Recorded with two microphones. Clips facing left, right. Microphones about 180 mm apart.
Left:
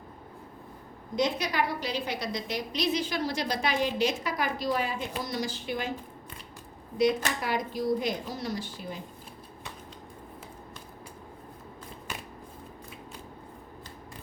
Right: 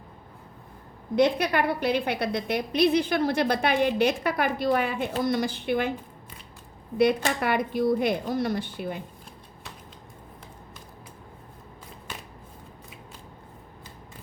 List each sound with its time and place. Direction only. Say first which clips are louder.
1.1 s a woman's voice: right 6 dB; 60° right (ahead or behind)
7.0 s a woman's voice: right 4 dB; 60° right (ahead or behind)